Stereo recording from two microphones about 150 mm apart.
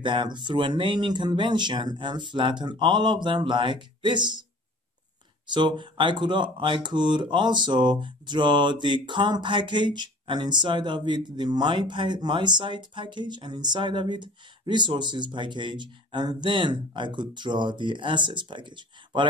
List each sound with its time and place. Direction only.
0.0 s speech: 30° right (ahead or behind)
5.5 s speech: 30° right (ahead or behind)